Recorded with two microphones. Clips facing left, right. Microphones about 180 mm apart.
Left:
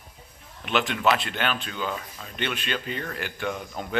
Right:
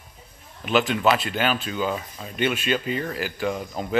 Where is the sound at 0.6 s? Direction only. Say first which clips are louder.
Right 4 dB; centre (ahead or behind).